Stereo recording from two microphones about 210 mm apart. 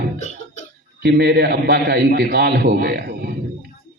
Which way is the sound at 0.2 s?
35° left (ahead or behind).